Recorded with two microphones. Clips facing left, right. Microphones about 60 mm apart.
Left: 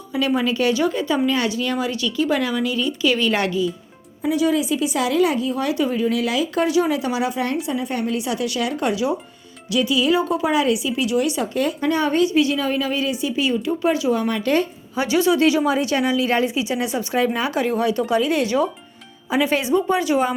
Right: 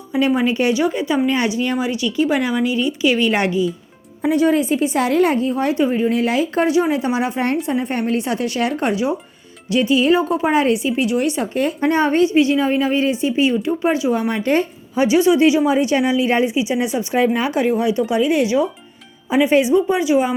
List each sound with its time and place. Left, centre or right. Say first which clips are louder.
0.1 s speech: right 3 dB; right
4.2 s a woman's voice: right 4 dB; right; by 20.3 s centre